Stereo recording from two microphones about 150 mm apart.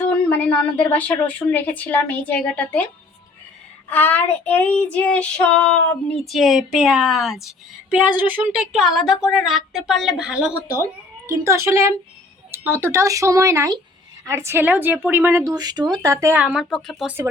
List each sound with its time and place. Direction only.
0.0 s a woman's voice: 10° left (ahead or behind)
3.8 s child singing: 10° left (ahead or behind); by 10.6 s 5° right (ahead or behind)
11.3 s a woman's voice: 20° right (ahead or behind)
15.5 s speech: 25° right (ahead or behind)
16.2 s a woman's voice: 15° right (ahead or behind)
16.6 s child singing: centre (ahead or behind)